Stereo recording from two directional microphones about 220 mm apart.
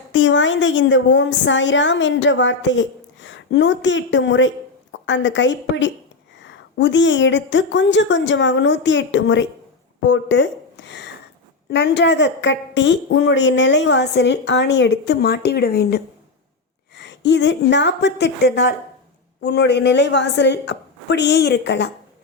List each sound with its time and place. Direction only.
0.1 s a woman's voice: 55° left (ahead or behind)